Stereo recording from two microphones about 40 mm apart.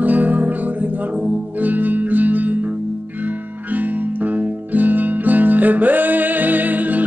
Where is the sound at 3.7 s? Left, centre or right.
Right.